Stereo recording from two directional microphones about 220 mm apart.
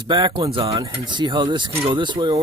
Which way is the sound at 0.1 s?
20° right (ahead or behind).